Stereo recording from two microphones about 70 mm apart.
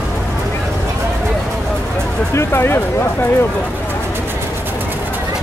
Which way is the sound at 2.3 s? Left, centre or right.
Left.